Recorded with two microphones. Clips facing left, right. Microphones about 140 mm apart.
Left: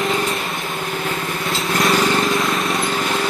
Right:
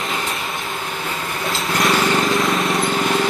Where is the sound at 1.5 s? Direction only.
Centre (ahead or behind).